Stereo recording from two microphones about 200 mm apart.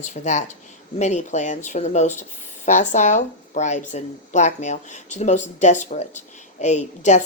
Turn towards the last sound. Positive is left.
turn(degrees=35)  # may be behind; listen again after turning